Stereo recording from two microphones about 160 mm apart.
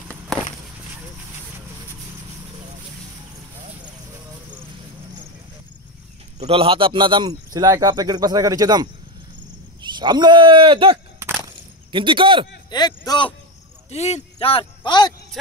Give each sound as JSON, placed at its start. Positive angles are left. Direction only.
{"t": 6.4, "sound": "speech", "side_deg": -35}
{"t": 11.4, "sound": "a sound", "side_deg": -30}
{"t": 12.7, "sound": "speech", "side_deg": 25}
{"t": 13.8, "sound": "speech", "side_deg": 45}